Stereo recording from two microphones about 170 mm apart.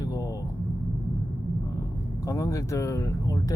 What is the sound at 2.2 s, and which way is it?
Speech, 20° left (ahead or behind).